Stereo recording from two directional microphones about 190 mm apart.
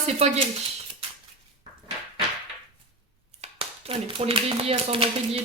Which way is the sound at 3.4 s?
30° right (ahead or behind).